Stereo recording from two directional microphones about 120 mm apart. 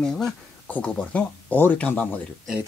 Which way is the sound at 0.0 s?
10° left (ahead or behind).